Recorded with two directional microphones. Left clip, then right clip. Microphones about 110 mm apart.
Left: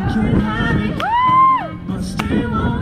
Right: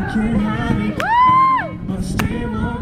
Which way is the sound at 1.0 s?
40° right (ahead or behind).